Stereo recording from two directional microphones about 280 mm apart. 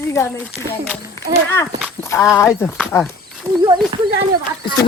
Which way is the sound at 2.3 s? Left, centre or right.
Centre.